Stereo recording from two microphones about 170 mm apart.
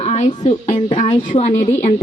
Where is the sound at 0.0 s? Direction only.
40° left (ahead or behind).